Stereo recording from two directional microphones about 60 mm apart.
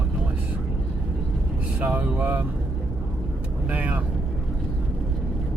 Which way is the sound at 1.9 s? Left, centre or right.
Right.